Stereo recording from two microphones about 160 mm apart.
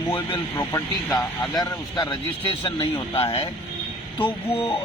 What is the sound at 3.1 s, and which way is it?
Speech, 35° left (ahead or behind).